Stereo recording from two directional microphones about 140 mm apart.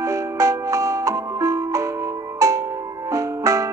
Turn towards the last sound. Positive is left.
turn(degrees=-20)  # may be behind; listen again after turning